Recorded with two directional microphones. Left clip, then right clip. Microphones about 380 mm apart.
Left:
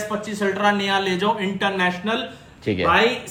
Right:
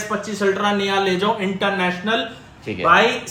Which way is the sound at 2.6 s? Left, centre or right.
Left.